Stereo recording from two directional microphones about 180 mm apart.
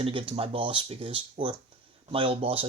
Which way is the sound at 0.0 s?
30° right (ahead or behind).